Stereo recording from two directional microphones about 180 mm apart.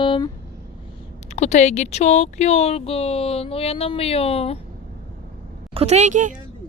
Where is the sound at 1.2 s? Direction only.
40° left (ahead or behind).